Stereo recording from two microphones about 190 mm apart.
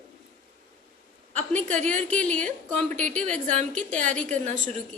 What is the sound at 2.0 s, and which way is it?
A woman's voice, 5° left (ahead or behind).